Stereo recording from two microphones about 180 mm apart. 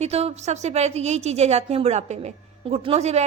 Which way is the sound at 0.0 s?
35° right (ahead or behind).